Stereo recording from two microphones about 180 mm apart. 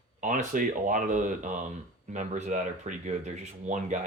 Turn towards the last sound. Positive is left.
turn(degrees=-40)  # may be behind; listen again after turning